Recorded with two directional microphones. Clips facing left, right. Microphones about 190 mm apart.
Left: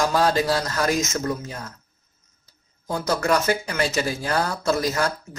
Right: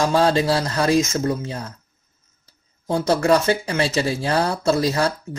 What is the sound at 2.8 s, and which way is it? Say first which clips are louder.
Speech: right 5 dB; 30° right (ahead or behind).